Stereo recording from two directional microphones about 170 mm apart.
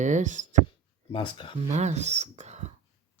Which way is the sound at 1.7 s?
40° right (ahead or behind).